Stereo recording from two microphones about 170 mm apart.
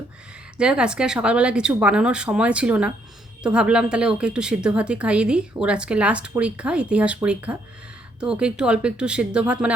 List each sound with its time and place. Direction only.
0.5 s a woman's voice: 5° right (ahead or behind)